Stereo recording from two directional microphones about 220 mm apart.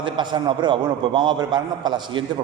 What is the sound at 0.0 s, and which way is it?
A man's voice, 20° right (ahead or behind).